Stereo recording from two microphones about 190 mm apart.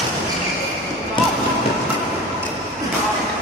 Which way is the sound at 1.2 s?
25° left (ahead or behind).